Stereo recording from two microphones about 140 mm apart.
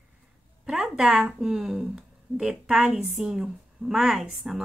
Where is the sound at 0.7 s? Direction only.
5° right (ahead or behind).